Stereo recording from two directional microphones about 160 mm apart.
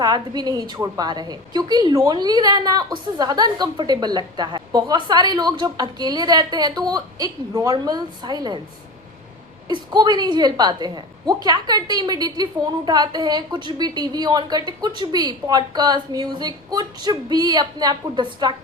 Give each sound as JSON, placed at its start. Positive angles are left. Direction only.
{"t": 0.0, "sound": "a woman's voice", "side_deg": -25}
{"t": 9.6, "sound": "a woman's voice", "side_deg": -25}